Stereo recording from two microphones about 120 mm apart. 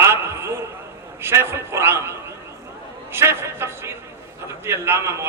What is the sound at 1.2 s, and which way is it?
A man's voice, 20° right (ahead or behind).